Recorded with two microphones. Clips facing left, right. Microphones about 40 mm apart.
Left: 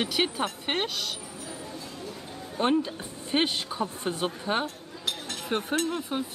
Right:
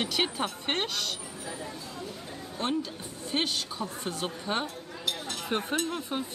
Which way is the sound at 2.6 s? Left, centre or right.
Left.